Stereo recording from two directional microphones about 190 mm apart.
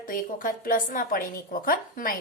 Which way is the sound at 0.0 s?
45° left (ahead or behind).